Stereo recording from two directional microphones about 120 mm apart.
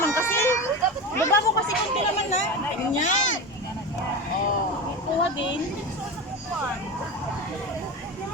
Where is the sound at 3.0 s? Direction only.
90° left.